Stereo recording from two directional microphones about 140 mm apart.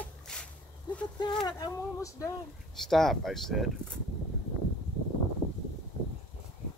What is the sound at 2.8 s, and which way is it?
Speech, centre (ahead or behind).